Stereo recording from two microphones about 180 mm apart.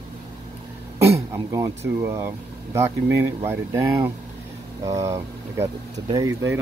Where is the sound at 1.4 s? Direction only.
15° right (ahead or behind).